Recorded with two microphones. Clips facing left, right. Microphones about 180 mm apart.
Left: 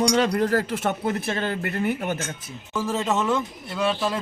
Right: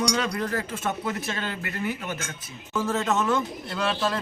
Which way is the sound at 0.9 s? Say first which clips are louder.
Left 4 dB; 55° left (ahead or behind).